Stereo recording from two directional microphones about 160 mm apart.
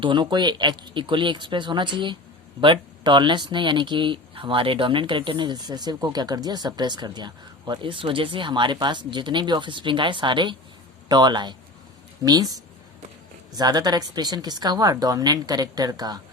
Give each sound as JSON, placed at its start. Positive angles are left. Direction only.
{"t": 0.0, "sound": "speech", "side_deg": -30}